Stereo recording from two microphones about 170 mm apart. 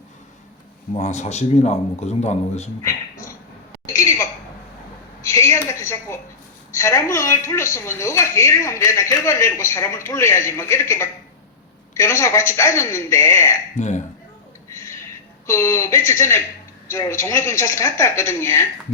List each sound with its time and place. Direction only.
0.9 s speech: 45° left (ahead or behind)
5.3 s a sound: 15° left (ahead or behind)
6.7 s a woman's voice: 15° left (ahead or behind)
13.7 s speech: 45° left (ahead or behind)
15.4 s a woman's voice: 15° left (ahead or behind)